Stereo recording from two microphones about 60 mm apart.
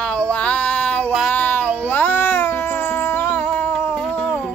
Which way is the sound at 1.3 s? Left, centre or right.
Left.